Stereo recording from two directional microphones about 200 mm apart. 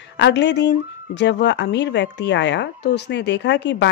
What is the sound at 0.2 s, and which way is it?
A woman's voice, 60° left (ahead or behind).